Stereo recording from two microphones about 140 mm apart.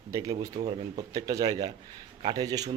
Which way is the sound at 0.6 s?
45° right (ahead or behind).